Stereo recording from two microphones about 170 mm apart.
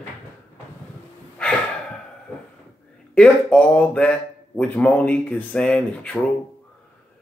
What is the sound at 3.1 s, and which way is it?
Speech, 5° left (ahead or behind).